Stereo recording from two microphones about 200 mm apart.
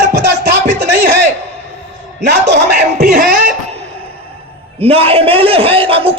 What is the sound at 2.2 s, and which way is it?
Speech, 55° right (ahead or behind).